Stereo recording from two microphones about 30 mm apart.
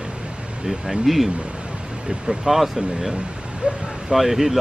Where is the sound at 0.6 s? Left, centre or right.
Centre.